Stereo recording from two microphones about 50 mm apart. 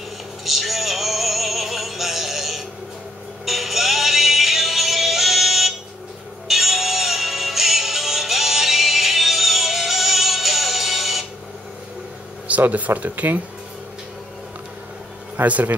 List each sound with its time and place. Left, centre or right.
0.5 s music: centre
12.4 s speech: right
15.4 s speech: right